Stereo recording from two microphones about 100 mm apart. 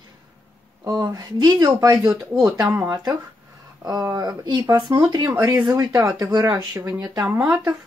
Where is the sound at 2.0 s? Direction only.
5° right (ahead or behind).